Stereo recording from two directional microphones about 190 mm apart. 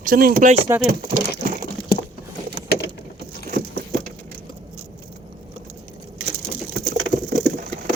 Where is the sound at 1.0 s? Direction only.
45° right (ahead or behind).